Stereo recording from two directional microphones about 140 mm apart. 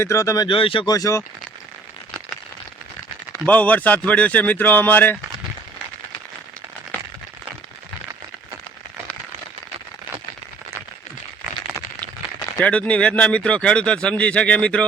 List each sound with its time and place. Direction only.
0.0 s speech: 20° left (ahead or behind)
0.4 s speech: 40° left (ahead or behind)
3.4 s speech: 10° left (ahead or behind)
12.5 s speech: 10° left (ahead or behind)